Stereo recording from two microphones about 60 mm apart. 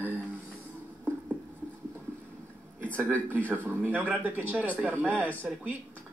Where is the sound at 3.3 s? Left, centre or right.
Left.